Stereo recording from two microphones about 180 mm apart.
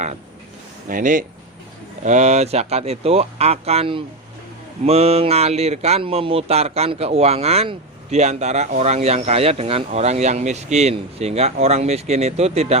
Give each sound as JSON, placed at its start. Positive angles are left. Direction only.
{"t": 0.9, "sound": "speech", "side_deg": -50}